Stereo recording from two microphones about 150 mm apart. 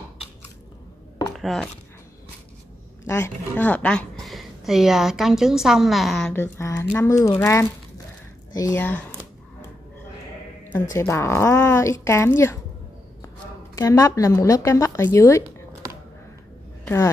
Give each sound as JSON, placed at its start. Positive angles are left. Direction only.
{"t": 1.3, "sound": "speech", "side_deg": 0}
{"t": 3.1, "sound": "a woman's voice", "side_deg": 20}
{"t": 6.3, "sound": "speech", "side_deg": 15}
{"t": 8.7, "sound": "speech", "side_deg": 10}
{"t": 10.9, "sound": "speech", "side_deg": 20}
{"t": 13.7, "sound": "speech", "side_deg": 20}
{"t": 16.8, "sound": "speech", "side_deg": 15}